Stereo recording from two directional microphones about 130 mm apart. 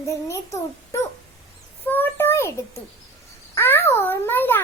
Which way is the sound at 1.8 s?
15° left (ahead or behind).